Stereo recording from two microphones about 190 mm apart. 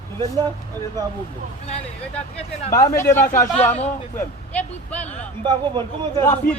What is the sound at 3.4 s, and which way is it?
Speech, 10° left (ahead or behind).